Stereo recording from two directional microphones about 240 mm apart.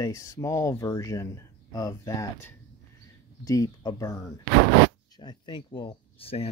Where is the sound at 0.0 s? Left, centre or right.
Centre.